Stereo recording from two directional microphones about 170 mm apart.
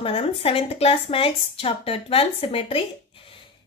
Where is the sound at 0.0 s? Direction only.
35° left (ahead or behind).